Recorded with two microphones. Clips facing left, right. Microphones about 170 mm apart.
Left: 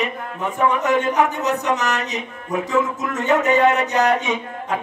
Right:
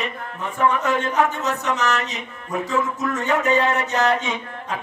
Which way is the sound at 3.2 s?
20° left (ahead or behind).